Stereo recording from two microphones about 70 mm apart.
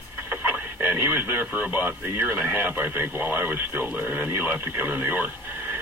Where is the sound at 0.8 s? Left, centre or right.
Right.